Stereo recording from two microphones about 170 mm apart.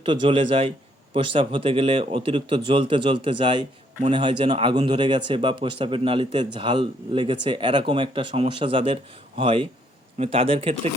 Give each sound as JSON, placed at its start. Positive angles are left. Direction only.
{"t": 0.0, "sound": "a man's voice", "side_deg": -30}